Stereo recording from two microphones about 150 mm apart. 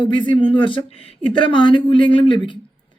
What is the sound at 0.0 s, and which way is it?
Speech, 30° left (ahead or behind).